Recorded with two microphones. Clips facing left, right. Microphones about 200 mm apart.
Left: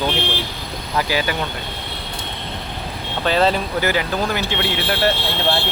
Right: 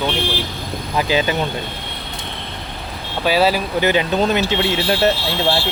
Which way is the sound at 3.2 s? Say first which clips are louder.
Right 1 dB; 10° right (ahead or behind).